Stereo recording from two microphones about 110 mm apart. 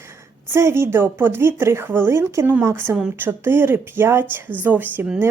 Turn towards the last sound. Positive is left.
turn(degrees=-20)  # may be behind; listen again after turning